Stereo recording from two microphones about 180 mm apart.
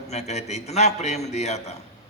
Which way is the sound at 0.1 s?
40° left (ahead or behind).